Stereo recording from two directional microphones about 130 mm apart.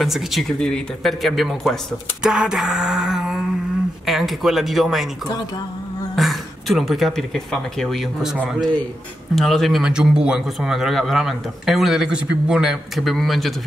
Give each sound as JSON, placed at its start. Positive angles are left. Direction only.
{"t": 0.0, "sound": "a man's voice", "side_deg": 0}
{"t": 2.2, "sound": "a sound", "side_deg": -5}
{"t": 4.0, "sound": "a man's voice", "side_deg": 0}
{"t": 6.1, "sound": "a man's voice", "side_deg": 0}